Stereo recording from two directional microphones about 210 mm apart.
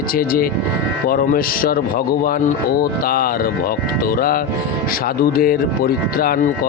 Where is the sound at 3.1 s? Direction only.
45° left (ahead or behind).